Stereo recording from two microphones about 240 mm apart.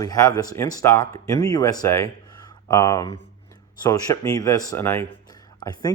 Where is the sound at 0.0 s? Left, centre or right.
Centre.